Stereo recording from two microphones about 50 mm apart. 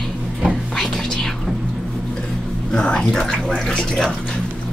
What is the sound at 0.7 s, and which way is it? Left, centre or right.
Whispering, centre.